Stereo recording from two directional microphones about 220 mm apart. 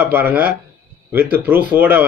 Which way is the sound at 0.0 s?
10° right (ahead or behind).